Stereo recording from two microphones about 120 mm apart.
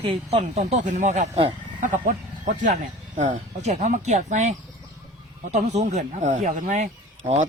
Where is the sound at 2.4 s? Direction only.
90° right.